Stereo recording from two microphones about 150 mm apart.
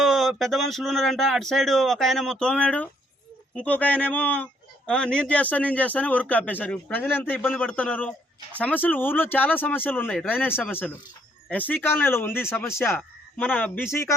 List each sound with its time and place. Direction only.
0.0 s a man's voice: centre (ahead or behind)